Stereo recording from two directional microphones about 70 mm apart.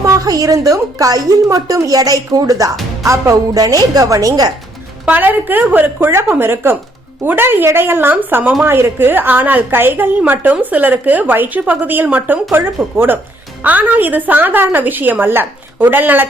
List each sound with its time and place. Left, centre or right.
0.0 s a woman's voice: right
3.0 s music: right
3.6 s a woman's voice: right
5.1 s a woman's voice: right